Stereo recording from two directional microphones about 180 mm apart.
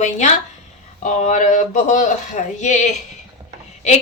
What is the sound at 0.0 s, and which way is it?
A woman's voice, 40° left (ahead or behind).